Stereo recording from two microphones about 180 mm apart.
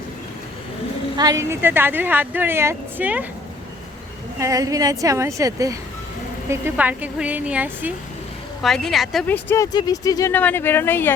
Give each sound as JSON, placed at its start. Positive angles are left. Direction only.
{"t": 1.1, "sound": "a woman's voice", "side_deg": -20}
{"t": 4.4, "sound": "a woman's voice", "side_deg": -20}
{"t": 8.6, "sound": "a woman's voice", "side_deg": 0}
{"t": 9.2, "sound": "a woman's voice", "side_deg": 10}